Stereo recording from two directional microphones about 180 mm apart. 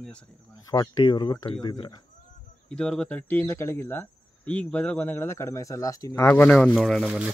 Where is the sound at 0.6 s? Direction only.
20° left (ahead or behind).